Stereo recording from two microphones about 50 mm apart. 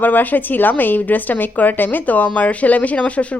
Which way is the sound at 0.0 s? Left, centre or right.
Left.